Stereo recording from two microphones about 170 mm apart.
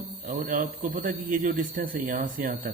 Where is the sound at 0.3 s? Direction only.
50° right (ahead or behind).